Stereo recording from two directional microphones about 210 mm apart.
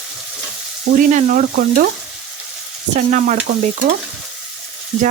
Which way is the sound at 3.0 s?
35° right (ahead or behind).